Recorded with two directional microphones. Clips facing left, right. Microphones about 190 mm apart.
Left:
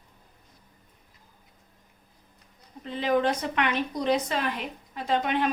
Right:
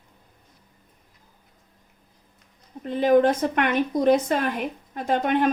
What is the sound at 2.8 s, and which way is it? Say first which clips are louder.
A woman's voice: right 7 dB; 50° right (ahead or behind).